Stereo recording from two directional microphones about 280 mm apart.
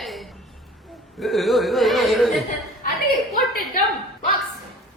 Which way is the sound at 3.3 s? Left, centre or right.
Left.